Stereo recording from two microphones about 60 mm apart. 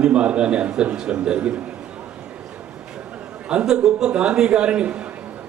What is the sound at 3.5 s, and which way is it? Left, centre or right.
A man's voice, centre.